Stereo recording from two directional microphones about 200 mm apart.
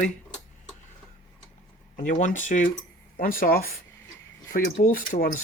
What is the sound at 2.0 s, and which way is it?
Speech, 40° left (ahead or behind).